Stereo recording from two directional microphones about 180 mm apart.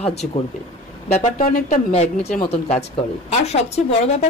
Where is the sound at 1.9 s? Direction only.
35° left (ahead or behind).